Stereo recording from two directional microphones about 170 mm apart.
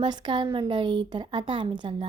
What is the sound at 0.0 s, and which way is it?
Speech, 25° right (ahead or behind).